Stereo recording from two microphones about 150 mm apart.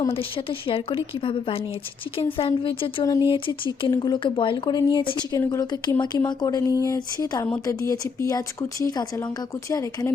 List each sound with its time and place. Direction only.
0.1 s a woman's voice: 40° left (ahead or behind); by 10.1 s 20° left (ahead or behind)